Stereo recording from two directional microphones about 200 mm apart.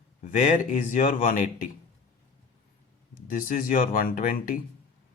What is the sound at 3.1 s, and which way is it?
Speech, 45° left (ahead or behind).